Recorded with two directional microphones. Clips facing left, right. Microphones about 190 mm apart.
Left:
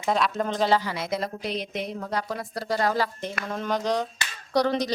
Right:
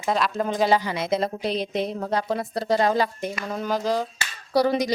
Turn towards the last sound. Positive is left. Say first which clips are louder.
# right 3 dB
turn(degrees=-10)  # may be behind; listen again after turning